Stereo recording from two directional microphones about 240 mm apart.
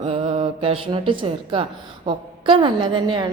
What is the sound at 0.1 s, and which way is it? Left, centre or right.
A woman's voice, right.